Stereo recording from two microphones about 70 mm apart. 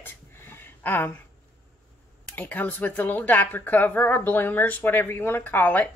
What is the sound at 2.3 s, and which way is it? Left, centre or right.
Speech, left.